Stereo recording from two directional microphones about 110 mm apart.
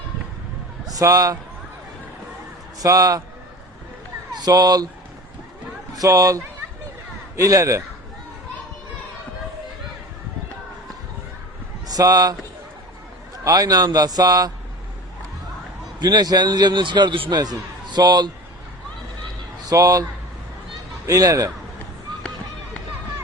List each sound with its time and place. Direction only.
0.9 s a man's voice: 30° right (ahead or behind)
2.8 s a man's voice: 30° right (ahead or behind)
4.4 s a man's voice: 35° right (ahead or behind)
6.0 s a man's voice: 30° right (ahead or behind)
11.9 s a man's voice: 35° right (ahead or behind)
13.4 s a man's voice: 35° right (ahead or behind)
16.0 s a man's voice: 40° right (ahead or behind)
19.7 s a man's voice: 30° right (ahead or behind)
21.1 s a man's voice: 30° right (ahead or behind)